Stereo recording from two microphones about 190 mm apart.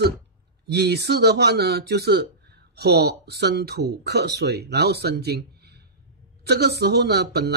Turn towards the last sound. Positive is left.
turn(degrees=-60)  # may be behind; listen again after turning